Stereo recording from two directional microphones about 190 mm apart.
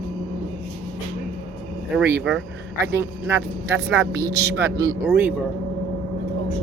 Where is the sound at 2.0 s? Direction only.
15° right (ahead or behind).